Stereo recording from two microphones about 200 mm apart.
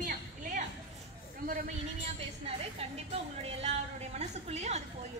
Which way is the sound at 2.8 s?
30° right (ahead or behind).